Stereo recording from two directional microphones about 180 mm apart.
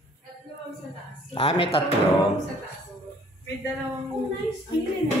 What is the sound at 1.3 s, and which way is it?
Speech, 35° left (ahead or behind).